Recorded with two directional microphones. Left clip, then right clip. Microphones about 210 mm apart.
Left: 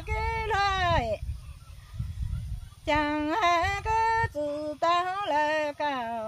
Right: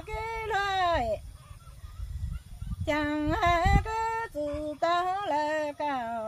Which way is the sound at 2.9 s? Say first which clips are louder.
Left 2 dB; 10° left (ahead or behind).